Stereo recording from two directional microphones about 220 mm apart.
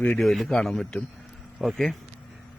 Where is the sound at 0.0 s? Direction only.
5° left (ahead or behind).